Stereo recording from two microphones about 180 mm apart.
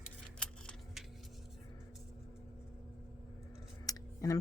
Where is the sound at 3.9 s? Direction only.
20° left (ahead or behind).